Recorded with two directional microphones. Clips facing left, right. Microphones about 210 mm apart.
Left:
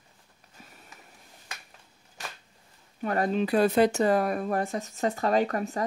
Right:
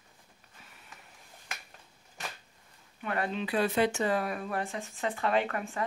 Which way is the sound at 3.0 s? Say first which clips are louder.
Left 7 dB; 40° left (ahead or behind).